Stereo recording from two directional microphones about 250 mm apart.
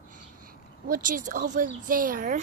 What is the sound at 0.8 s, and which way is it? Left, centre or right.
Speech, right.